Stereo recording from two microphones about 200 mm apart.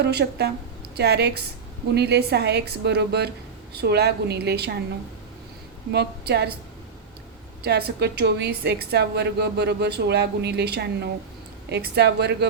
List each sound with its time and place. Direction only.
0.0 s a woman's voice: 55° right (ahead or behind)
5.9 s a woman's voice: 55° right (ahead or behind)
7.6 s a woman's voice: 55° right (ahead or behind)